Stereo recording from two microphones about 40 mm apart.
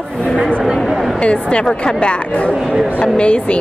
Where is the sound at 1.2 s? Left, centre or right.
Left.